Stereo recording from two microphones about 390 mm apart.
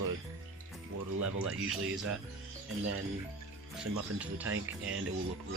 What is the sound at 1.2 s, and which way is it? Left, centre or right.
Speech, right.